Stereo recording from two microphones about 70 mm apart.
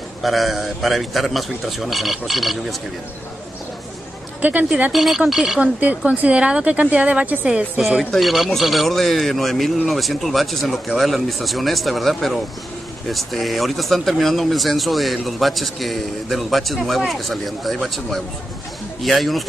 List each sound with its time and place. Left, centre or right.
0.2 s speech: centre
4.4 s speech: right
4.9 s speech: centre
5.6 s speech: right
8.2 s speech: centre